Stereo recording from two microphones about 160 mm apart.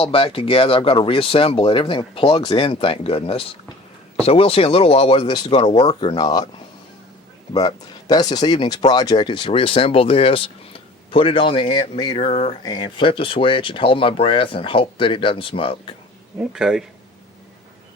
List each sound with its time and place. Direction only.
0.0 s speech: 35° left (ahead or behind)
7.5 s speech: 25° left (ahead or behind); by 12.5 s 40° left (ahead or behind)
12.6 s speech: 25° left (ahead or behind)
16.4 s a man's voice: 5° right (ahead or behind)